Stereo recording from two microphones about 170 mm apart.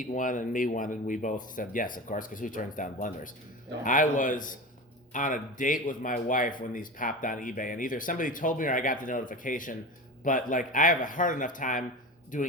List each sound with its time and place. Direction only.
0.0 s speech: 50° left (ahead or behind)